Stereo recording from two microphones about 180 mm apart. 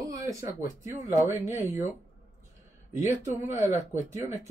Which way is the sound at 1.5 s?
40° left (ahead or behind).